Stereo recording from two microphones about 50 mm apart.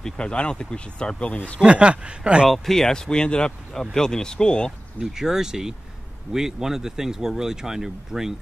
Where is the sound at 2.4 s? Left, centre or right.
Centre.